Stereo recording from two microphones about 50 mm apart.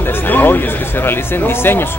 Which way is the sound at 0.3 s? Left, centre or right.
Left.